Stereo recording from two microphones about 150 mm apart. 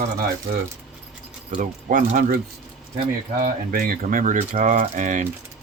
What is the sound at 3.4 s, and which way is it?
Speech, 70° right (ahead or behind).